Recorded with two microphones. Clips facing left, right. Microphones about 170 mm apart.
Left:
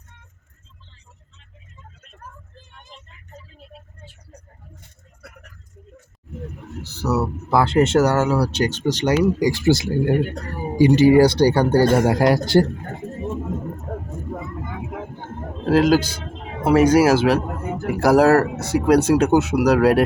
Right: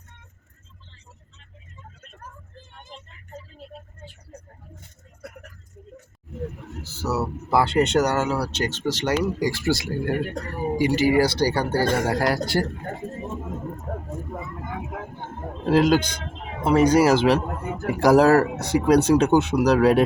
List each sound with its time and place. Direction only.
6.8 s speech: 5° right (ahead or behind); by 12.6 s 25° left (ahead or behind)
15.7 s speech: 5° left (ahead or behind)